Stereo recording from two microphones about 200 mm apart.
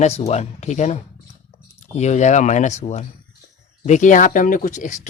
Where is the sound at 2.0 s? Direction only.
35° left (ahead or behind).